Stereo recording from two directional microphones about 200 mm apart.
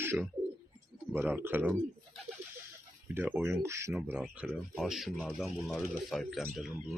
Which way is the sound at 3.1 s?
10° right (ahead or behind).